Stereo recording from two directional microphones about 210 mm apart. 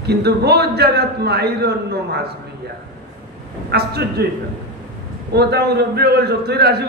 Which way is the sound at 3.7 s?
50° right (ahead or behind).